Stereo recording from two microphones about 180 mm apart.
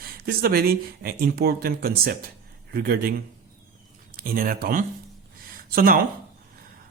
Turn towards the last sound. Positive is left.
turn(degrees=-50)  # may be behind; listen again after turning